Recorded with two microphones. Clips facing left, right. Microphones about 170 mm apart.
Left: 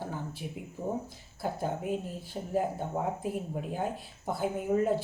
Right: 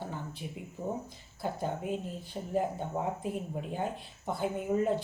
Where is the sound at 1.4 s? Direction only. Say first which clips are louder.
Left 1 dB; 5° left (ahead or behind).